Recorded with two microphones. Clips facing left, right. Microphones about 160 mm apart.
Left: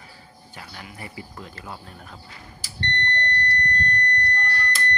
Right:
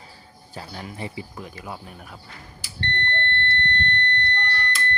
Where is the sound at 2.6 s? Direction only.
40° left (ahead or behind).